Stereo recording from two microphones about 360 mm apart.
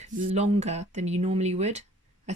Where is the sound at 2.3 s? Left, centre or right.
Centre.